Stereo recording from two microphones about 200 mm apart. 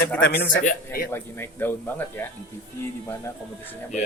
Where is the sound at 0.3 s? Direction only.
50° left (ahead or behind).